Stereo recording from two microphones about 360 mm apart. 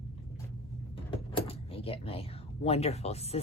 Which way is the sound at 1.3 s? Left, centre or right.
Centre.